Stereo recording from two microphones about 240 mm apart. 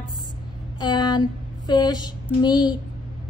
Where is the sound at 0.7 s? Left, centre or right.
Centre.